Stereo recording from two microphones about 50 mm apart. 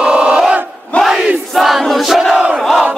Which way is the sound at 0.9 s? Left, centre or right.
Left.